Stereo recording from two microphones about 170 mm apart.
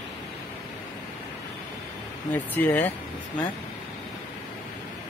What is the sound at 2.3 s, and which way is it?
Speech, 10° left (ahead or behind).